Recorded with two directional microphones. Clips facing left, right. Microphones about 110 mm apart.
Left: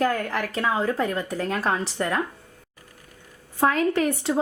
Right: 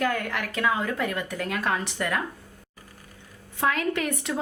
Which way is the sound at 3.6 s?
35° left (ahead or behind).